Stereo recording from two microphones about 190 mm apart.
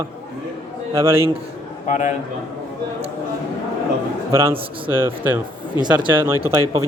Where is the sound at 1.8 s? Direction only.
40° left (ahead or behind).